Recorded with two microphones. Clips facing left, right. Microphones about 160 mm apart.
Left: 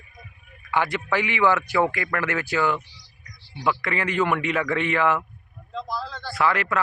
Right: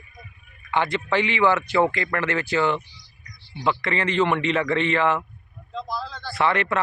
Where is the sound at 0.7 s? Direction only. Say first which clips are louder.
Right 1 dB; 10° left (ahead or behind).